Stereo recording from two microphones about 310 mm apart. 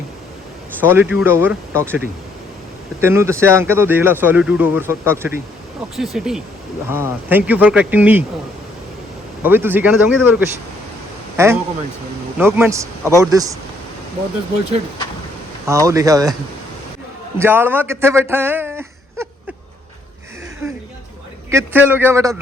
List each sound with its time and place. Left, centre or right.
0.8 s speech: centre
3.0 s speech: centre
9.4 s a man's voice: centre
15.6 s speech: centre
17.3 s speech: centre
21.5 s speech: centre